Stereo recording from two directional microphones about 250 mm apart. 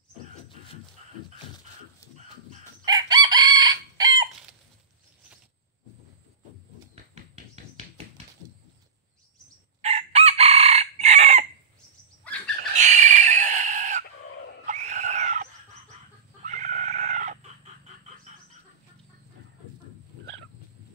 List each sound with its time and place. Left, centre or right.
1.0 s a sound: right
2.8 s chicken: centre
7.6 s tap: right
9.8 s chicken: right
12.5 s a sound: right
14.7 s screaming: right
16.4 s chicken: right